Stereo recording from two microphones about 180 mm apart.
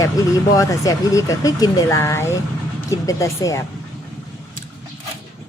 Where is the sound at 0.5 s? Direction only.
20° left (ahead or behind).